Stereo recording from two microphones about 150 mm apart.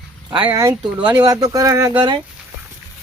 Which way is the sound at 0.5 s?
20° right (ahead or behind).